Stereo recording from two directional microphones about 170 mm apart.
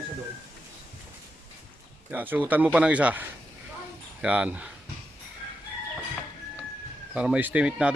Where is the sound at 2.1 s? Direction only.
10° right (ahead or behind).